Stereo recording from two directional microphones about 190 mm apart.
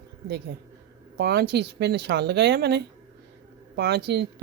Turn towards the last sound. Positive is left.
turn(degrees=-60)  # may be behind; listen again after turning